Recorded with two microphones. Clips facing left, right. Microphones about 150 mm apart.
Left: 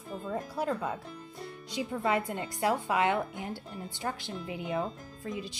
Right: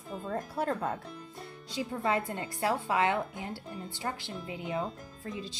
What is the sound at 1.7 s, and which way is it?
A woman's voice, 20° left (ahead or behind).